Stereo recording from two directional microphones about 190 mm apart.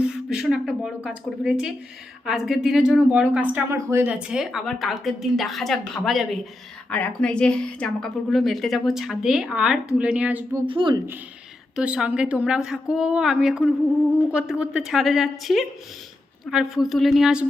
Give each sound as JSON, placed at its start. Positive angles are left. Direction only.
{"t": 0.0, "sound": "speech", "side_deg": -5}
{"t": 10.7, "sound": "speech", "side_deg": -25}
{"t": 11.8, "sound": "speech", "side_deg": -5}